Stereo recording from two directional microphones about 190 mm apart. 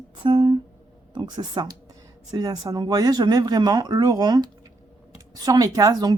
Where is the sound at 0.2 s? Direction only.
25° right (ahead or behind).